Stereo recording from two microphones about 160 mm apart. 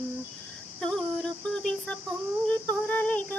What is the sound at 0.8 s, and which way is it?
Female singing, 5° left (ahead or behind).